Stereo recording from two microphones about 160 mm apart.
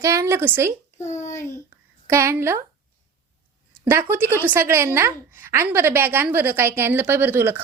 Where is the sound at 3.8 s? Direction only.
15° right (ahead or behind).